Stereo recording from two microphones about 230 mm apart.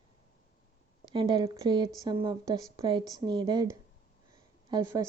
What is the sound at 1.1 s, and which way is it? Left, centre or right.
Speech, right.